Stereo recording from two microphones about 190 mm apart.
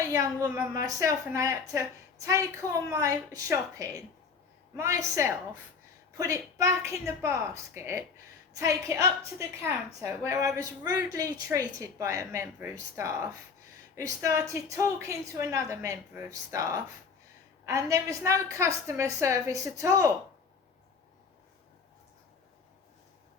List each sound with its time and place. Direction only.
0.0 s a woman's voice: 15° right (ahead or behind)